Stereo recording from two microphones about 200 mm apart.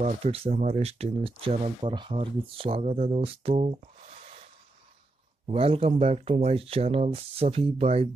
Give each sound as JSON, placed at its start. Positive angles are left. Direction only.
{"t": 0.0, "sound": "speech", "side_deg": -30}
{"t": 5.5, "sound": "speech", "side_deg": -30}